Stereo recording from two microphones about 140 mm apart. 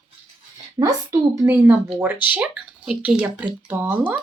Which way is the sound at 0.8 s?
25° right (ahead or behind).